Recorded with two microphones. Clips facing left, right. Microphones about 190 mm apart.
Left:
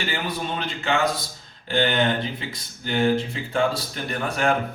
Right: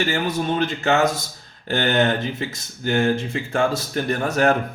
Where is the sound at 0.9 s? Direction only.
45° right (ahead or behind).